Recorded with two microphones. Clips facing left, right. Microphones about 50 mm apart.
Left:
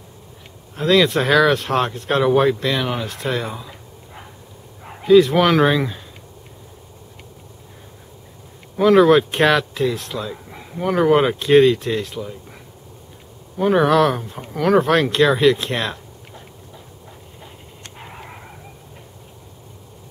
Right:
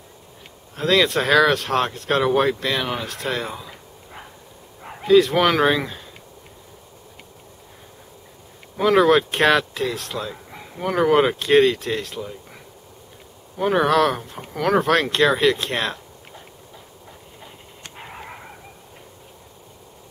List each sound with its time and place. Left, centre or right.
0.7 s speech: centre
4.8 s speech: centre
8.7 s speech: centre
13.6 s speech: centre
17.9 s a sound: centre